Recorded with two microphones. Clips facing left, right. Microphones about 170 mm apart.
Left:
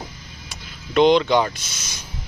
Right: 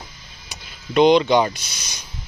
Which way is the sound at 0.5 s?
5° right (ahead or behind).